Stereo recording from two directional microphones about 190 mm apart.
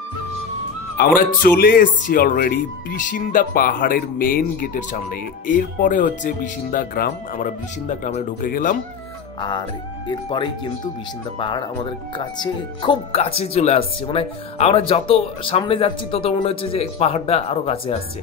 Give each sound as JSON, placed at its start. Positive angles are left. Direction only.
{"t": 0.9, "sound": "speech", "side_deg": 50}
{"t": 9.4, "sound": "speech", "side_deg": 25}